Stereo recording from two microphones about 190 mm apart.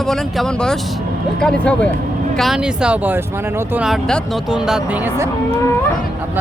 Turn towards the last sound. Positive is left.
turn(degrees=-15)  # may be behind; listen again after turning